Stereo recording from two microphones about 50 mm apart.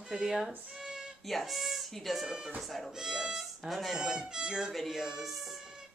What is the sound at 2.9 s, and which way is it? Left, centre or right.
Violin, centre.